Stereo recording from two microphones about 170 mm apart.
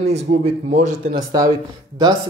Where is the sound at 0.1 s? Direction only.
40° right (ahead or behind).